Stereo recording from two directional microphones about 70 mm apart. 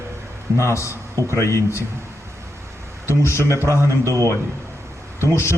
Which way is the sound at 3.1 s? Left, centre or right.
Left.